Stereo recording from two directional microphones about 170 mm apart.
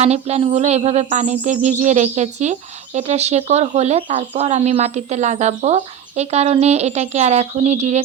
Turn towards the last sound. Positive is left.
turn(degrees=-40)  # may be behind; listen again after turning